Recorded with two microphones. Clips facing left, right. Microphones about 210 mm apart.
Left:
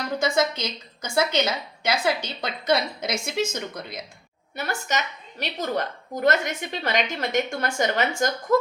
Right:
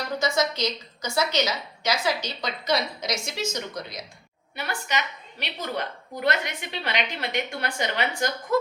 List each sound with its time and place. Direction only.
0.2 s a woman's voice: 55° left (ahead or behind)
4.5 s a woman's voice: 45° left (ahead or behind)